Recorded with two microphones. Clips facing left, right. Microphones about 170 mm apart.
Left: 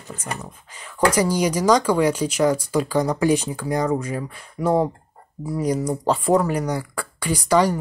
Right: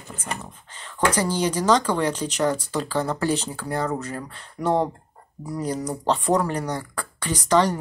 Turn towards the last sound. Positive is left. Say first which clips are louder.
# left 2 dB
turn(degrees=10)  # may be behind; listen again after turning